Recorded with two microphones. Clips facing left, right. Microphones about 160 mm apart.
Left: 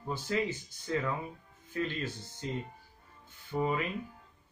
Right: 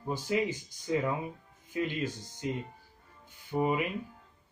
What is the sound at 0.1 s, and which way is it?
Speech, 15° right (ahead or behind).